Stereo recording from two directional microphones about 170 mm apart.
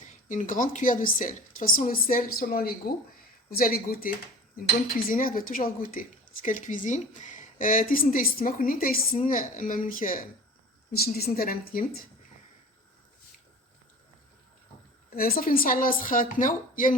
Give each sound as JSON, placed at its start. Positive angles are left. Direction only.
{"t": 0.3, "sound": "a woman's voice", "side_deg": 50}
{"t": 10.9, "sound": "speech", "side_deg": 65}
{"t": 15.1, "sound": "speech", "side_deg": 60}